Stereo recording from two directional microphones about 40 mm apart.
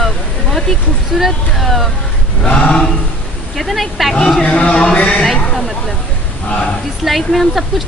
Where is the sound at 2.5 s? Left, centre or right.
Left.